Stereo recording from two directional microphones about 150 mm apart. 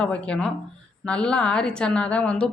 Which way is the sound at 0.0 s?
5° left (ahead or behind).